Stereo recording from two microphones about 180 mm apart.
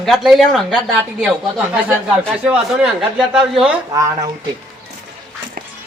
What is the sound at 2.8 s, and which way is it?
Speech, centre (ahead or behind).